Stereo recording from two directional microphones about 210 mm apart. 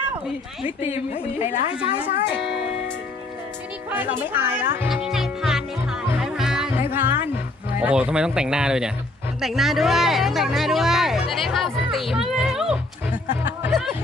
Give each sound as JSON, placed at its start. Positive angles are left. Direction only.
{"t": 0.9, "sound": "a woman's voice", "side_deg": 30}
{"t": 2.2, "sound": "speech", "side_deg": 55}
{"t": 3.9, "sound": "speech", "side_deg": -10}
{"t": 6.1, "sound": "music", "side_deg": 0}
{"t": 7.8, "sound": "speech", "side_deg": -5}
{"t": 13.4, "sound": "music", "side_deg": -10}
{"t": 13.7, "sound": "music", "side_deg": 0}